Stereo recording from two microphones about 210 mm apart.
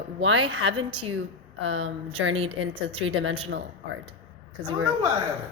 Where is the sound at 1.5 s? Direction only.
65° right (ahead or behind).